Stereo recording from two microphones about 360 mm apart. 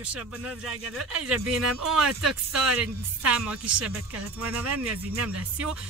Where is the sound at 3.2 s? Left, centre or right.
Right.